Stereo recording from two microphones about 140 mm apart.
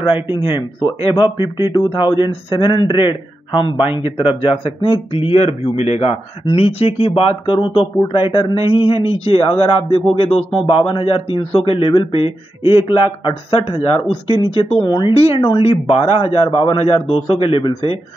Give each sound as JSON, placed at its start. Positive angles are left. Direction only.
{"t": 0.0, "sound": "a man's voice", "side_deg": 35}